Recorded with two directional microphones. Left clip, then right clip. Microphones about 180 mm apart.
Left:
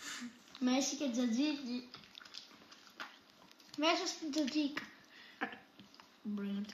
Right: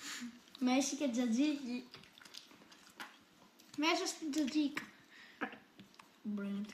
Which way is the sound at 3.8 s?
20° right (ahead or behind).